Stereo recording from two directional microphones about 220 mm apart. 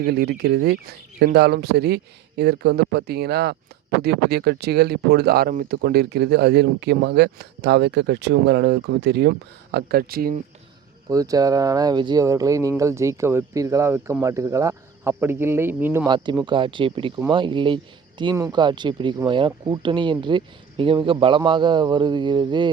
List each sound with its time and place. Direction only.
0.0 s speech: 45° right (ahead or behind)
11.1 s speech: 15° right (ahead or behind)
16.0 s speech: 20° right (ahead or behind)